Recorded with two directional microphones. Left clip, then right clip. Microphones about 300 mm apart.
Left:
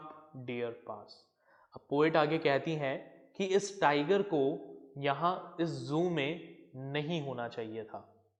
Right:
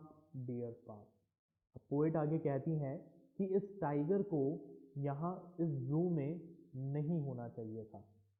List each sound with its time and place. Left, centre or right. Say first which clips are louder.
0.6 s a woman's voice: left 9 dB; centre
6.1 s a woman's voice: left 8 dB; centre